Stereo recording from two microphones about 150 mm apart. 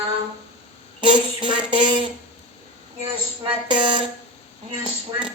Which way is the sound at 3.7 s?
30° right (ahead or behind).